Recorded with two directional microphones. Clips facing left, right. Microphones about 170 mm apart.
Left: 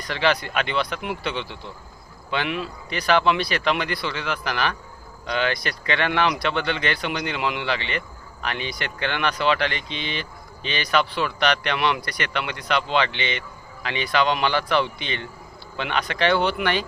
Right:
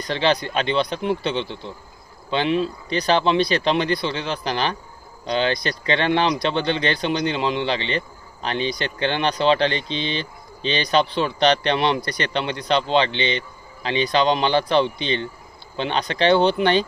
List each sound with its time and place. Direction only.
0.0 s speech: 25° right (ahead or behind)